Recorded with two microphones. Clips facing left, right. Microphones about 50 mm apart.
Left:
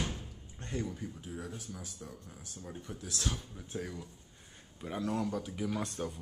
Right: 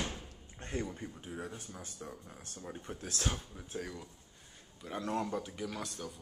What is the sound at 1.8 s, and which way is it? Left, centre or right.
Speech, right.